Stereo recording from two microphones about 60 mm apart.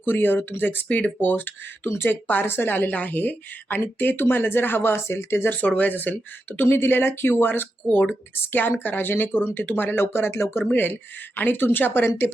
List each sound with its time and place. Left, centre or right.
0.0 s a woman's voice: left
5.5 s a woman's voice: left
8.8 s a woman's voice: left
11.3 s a woman's voice: left